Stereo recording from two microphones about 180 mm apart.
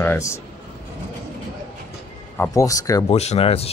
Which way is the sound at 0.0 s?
15° left (ahead or behind).